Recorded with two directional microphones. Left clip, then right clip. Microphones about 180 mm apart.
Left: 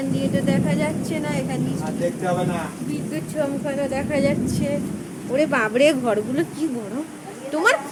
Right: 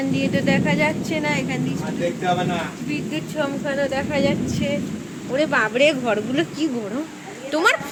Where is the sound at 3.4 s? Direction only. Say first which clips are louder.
Right 1 dB; 15° left (ahead or behind).